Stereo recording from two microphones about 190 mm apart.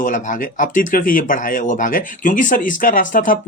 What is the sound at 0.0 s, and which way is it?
Speech, 45° left (ahead or behind).